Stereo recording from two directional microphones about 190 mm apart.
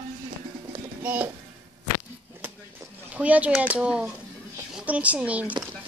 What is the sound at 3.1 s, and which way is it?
Speech, 5° right (ahead or behind).